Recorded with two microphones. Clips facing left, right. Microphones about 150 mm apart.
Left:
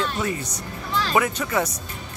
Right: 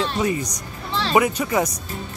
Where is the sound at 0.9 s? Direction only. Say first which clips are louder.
Right 3 dB; 30° right (ahead or behind).